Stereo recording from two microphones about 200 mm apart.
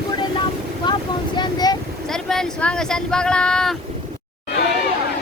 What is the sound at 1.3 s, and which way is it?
Vehicle, 20° left (ahead or behind).